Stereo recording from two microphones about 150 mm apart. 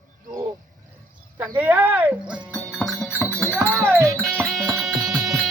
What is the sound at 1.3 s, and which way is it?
Speech, 10° right (ahead or behind).